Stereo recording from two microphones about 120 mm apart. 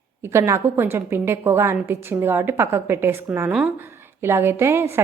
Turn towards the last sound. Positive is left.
turn(degrees=-20)  # may be behind; listen again after turning